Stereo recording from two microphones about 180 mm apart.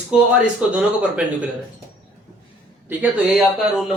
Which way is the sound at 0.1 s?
5° right (ahead or behind).